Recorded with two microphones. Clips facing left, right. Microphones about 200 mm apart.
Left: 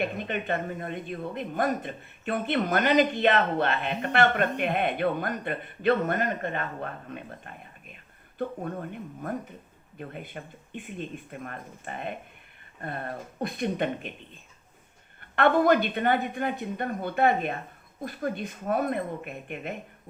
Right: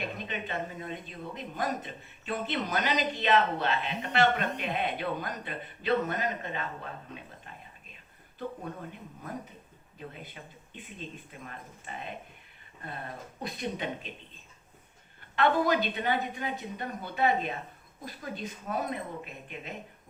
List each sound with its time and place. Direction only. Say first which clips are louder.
0.0 s speech: left 6 dB; 55° left (ahead or behind)
15.2 s speech: left 4 dB; 55° left (ahead or behind)